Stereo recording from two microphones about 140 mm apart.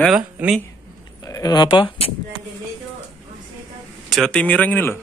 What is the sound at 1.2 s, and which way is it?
Speech, 25° left (ahead or behind).